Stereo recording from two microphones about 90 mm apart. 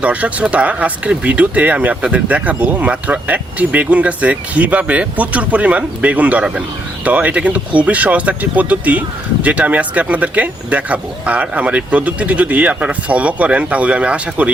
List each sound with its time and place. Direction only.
0.0 s speech: 15° right (ahead or behind)